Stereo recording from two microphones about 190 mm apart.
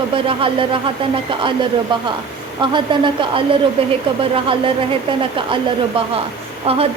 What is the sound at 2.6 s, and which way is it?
Speech, 25° right (ahead or behind).